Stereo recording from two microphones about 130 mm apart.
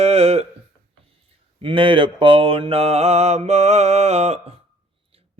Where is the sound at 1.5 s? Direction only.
40° right (ahead or behind).